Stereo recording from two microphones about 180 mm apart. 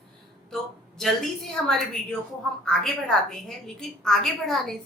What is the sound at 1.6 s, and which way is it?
A woman's voice, 5° left (ahead or behind).